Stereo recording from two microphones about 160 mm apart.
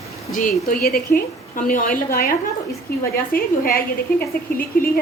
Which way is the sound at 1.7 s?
55° left (ahead or behind).